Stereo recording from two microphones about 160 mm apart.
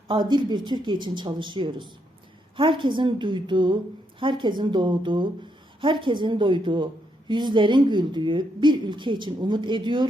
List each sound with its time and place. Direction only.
0.1 s a woman's voice: 30° right (ahead or behind)